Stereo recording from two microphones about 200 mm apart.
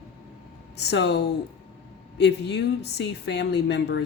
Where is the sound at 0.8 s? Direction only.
55° left (ahead or behind).